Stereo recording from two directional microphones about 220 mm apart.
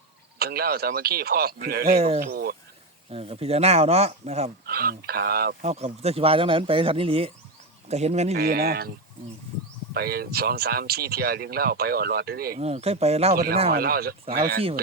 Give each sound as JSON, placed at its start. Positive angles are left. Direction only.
{"t": 0.3, "sound": "speech", "side_deg": -45}
{"t": 2.0, "sound": "speech", "side_deg": -30}
{"t": 2.2, "sound": "cricket", "side_deg": -45}
{"t": 3.1, "sound": "speech", "side_deg": -25}
{"t": 4.6, "sound": "speech", "side_deg": -45}
{"t": 5.6, "sound": "speech", "side_deg": -30}
{"t": 8.4, "sound": "speech", "side_deg": -45}
{"t": 9.9, "sound": "speech", "side_deg": -45}
{"t": 12.5, "sound": "speech", "side_deg": -30}
{"t": 13.3, "sound": "speech", "side_deg": -45}